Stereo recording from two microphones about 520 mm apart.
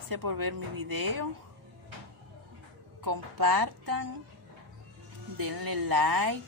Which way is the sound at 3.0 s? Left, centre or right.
Right.